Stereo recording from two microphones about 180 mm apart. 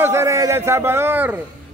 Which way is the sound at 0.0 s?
15° right (ahead or behind).